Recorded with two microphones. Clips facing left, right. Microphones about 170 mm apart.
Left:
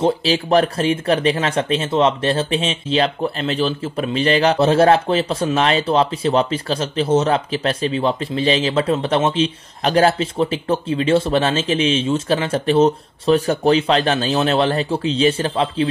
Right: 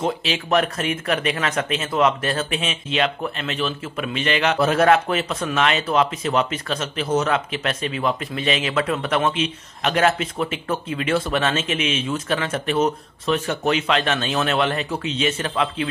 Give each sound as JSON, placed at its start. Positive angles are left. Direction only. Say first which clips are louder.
{"t": 0.0, "sound": "speech", "louder": "left 6 dB", "side_deg": 35}